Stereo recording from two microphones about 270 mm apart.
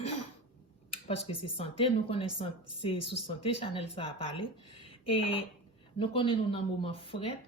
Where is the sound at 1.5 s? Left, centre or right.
Left.